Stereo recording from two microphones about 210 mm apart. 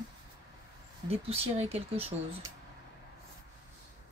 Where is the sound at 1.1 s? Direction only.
25° right (ahead or behind).